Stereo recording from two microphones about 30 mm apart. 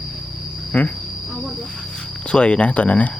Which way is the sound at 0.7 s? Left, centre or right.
Left.